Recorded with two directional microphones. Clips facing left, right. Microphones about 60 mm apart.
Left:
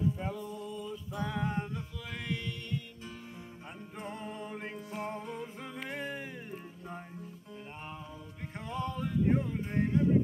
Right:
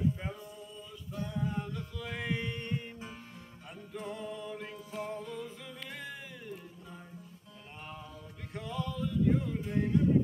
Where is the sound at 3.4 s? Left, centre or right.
Left.